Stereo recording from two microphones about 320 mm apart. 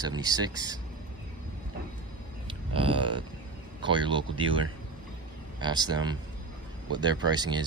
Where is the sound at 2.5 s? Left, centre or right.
Centre.